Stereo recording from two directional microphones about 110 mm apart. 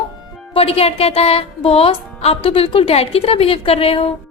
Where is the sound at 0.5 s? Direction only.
65° left (ahead or behind).